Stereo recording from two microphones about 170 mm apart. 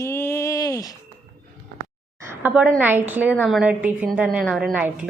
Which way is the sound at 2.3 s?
10° right (ahead or behind).